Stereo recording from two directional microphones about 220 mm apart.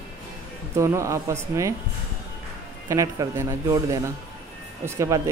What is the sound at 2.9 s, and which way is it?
Speech, 15° right (ahead or behind).